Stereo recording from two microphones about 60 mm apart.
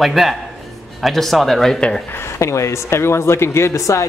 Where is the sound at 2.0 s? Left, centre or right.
Left.